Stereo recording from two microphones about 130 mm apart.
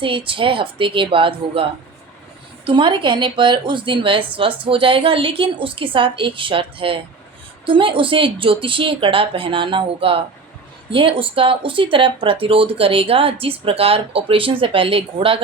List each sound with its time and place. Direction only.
0.0 s a woman's voice: 40° right (ahead or behind)
2.6 s a woman's voice: 40° right (ahead or behind)